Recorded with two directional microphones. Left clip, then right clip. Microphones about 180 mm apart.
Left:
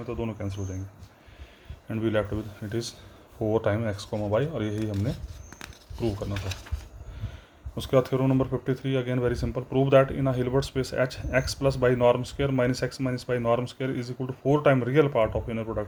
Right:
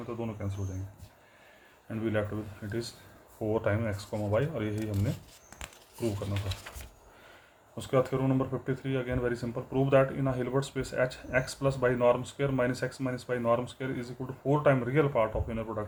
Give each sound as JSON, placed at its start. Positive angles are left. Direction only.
{"t": 0.1, "sound": "speech", "side_deg": 45}
{"t": 1.9, "sound": "speech", "side_deg": 45}
{"t": 7.8, "sound": "speech", "side_deg": 45}